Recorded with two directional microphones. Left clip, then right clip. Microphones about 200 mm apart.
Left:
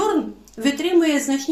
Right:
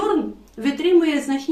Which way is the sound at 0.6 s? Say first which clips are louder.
Right 1 dB; 35° left (ahead or behind).